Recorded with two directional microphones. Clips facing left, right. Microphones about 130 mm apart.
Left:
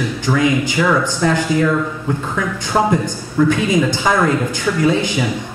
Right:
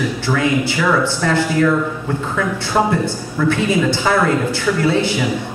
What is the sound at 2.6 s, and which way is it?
Speech, 15° left (ahead or behind).